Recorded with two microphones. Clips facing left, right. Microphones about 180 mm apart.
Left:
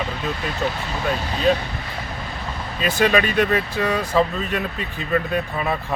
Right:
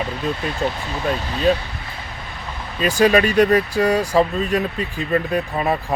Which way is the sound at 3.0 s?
40° right (ahead or behind).